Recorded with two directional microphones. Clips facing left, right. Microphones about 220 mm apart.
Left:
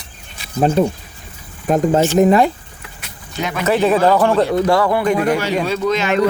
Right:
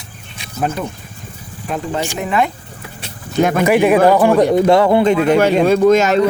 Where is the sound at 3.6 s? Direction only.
15° right (ahead or behind).